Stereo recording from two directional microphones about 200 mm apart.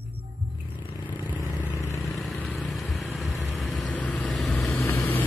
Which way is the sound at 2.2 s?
Centre (ahead or behind).